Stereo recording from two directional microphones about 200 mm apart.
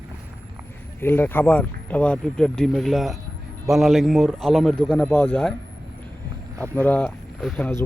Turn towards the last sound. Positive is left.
turn(degrees=5)  # may be behind; listen again after turning